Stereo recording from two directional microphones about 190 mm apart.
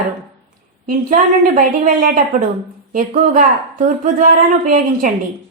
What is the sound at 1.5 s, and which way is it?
A woman's voice, 45° right (ahead or behind).